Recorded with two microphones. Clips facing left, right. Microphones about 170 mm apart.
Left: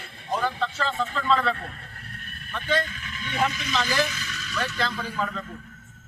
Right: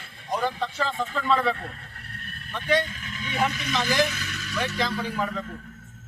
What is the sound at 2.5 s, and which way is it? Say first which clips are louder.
Speech: right 2 dB; 10° right (ahead or behind).